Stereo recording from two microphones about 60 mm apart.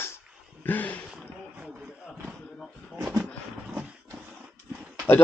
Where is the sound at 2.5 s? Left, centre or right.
Centre.